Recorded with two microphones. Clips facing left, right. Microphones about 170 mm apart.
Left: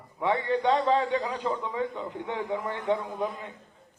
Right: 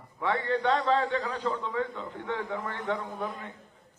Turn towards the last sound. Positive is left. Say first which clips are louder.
# left 3 dB
turn(degrees=15)  # may be behind; listen again after turning